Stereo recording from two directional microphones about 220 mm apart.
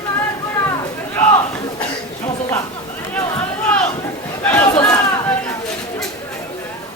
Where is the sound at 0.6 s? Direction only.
10° left (ahead or behind).